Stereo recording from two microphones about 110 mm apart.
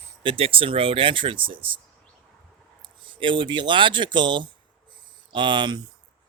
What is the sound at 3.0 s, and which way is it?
Speech, 50° right (ahead or behind).